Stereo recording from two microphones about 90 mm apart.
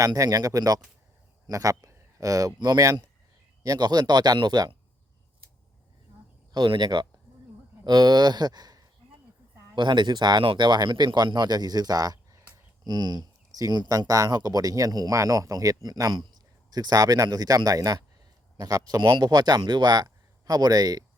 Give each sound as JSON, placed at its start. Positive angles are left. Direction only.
{"t": 0.0, "sound": "speech", "side_deg": -40}
{"t": 6.5, "sound": "speech", "side_deg": -50}